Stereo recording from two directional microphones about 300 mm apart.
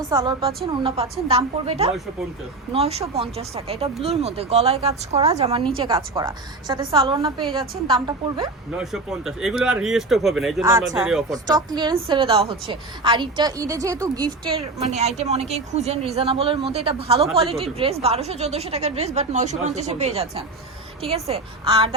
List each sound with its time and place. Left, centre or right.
0.0 s a woman's voice: centre
8.8 s speech: centre
11.4 s a woman's voice: centre